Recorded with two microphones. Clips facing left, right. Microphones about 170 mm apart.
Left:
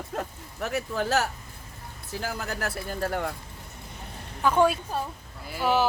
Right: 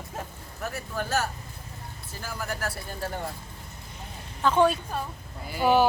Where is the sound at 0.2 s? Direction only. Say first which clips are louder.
Left 2 dB; 70° left (ahead or behind).